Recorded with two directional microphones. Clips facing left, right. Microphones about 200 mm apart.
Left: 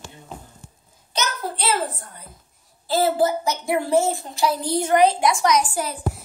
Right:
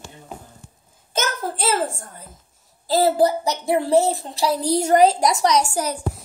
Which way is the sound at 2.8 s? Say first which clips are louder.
Right 2 dB; 35° right (ahead or behind).